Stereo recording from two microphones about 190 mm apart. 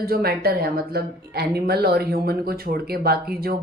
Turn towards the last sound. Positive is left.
turn(degrees=-55)  # may be behind; listen again after turning